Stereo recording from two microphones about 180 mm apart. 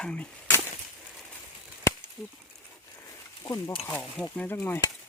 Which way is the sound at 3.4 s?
25° left (ahead or behind).